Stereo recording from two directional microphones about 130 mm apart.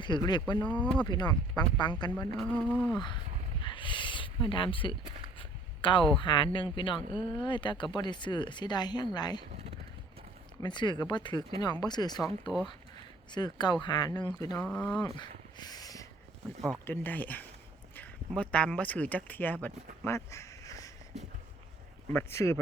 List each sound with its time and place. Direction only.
0.0 s speech: 35° left (ahead or behind)
0.7 s speech: 10° left (ahead or behind)
1.0 s speech: 30° left (ahead or behind)
3.6 s a sound: 40° left (ahead or behind)
6.1 s speech: 40° left (ahead or behind)
10.6 s speech: 35° left (ahead or behind)
13.3 s speech: 35° left (ahead or behind)
14.7 s speech: 10° left (ahead or behind)
14.9 s a sound: 35° left (ahead or behind)
16.8 s speech: 15° left (ahead or behind)
22.1 s speech: 20° left (ahead or behind)